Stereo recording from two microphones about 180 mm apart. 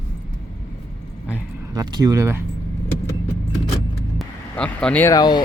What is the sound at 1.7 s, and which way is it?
Speech, 20° right (ahead or behind).